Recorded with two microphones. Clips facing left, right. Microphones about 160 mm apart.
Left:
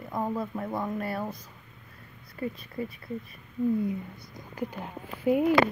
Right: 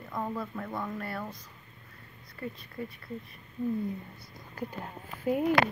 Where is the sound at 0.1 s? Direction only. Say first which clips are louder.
Left 4 dB; 25° left (ahead or behind).